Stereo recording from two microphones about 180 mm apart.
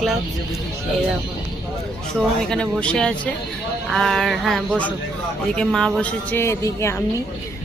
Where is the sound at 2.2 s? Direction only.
5° left (ahead or behind).